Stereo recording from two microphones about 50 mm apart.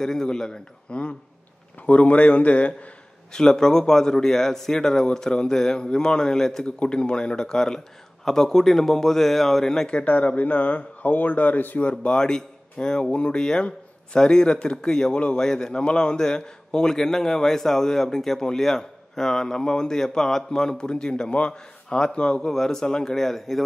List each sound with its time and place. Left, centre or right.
0.0 s a man's voice: centre
1.9 s speech: left
3.3 s a man's voice: centre
10.0 s speech: left
11.9 s a man's voice: centre